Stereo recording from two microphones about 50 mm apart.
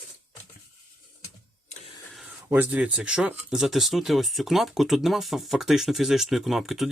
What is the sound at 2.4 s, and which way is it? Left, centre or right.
Speech, right.